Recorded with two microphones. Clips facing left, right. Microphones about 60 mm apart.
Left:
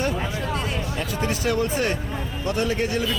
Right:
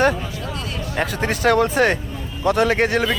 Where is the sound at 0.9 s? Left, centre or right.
Right.